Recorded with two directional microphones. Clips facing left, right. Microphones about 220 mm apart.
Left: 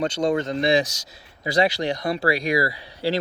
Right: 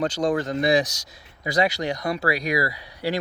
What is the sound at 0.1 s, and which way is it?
Speech, 25° left (ahead or behind).